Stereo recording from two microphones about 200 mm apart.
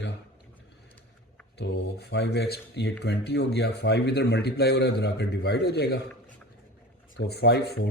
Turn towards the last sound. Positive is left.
turn(degrees=55)  # may be behind; listen again after turning